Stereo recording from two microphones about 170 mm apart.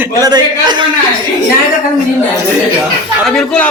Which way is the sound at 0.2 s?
25° right (ahead or behind).